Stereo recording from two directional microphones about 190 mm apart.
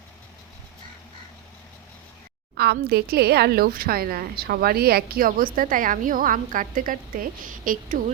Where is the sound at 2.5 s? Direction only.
55° right (ahead or behind).